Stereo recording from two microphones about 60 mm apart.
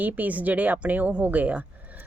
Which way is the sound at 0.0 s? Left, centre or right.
Right.